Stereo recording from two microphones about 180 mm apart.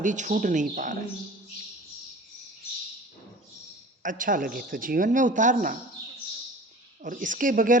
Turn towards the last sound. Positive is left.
turn(degrees=-50)  # may be behind; listen again after turning